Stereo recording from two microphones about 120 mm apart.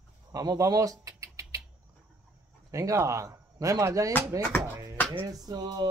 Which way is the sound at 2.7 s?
25° right (ahead or behind).